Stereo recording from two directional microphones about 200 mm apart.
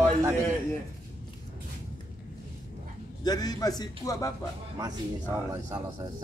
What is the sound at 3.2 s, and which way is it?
A man's voice, 20° left (ahead or behind).